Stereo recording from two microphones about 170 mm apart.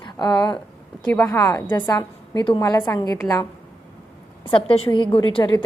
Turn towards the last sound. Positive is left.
turn(degrees=30)  # may be behind; listen again after turning